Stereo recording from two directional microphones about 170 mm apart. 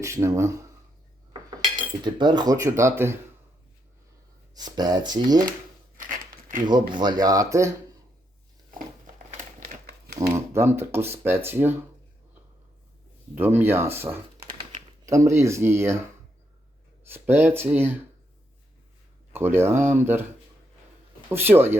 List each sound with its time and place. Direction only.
0.0 s speech: 15° right (ahead or behind)
1.3 s cutlery: 25° right (ahead or behind)
2.1 s speech: 25° right (ahead or behind)
4.5 s speech: 25° right (ahead or behind)
6.0 s crumpling: 50° right (ahead or behind)
6.7 s speech: 25° right (ahead or behind)
9.7 s crumpling: 55° right (ahead or behind)
10.2 s speech: 15° right (ahead or behind)
13.3 s speech: 10° right (ahead or behind)
17.1 s speech: 10° right (ahead or behind)
19.3 s speech: 15° right (ahead or behind)
21.2 s speech: 15° right (ahead or behind)